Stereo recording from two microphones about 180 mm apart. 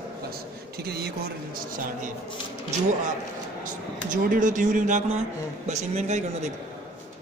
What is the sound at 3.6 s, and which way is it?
Speech, 45° right (ahead or behind).